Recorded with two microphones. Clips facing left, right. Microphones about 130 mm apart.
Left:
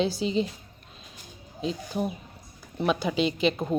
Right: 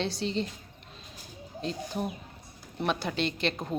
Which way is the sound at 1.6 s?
5° left (ahead or behind).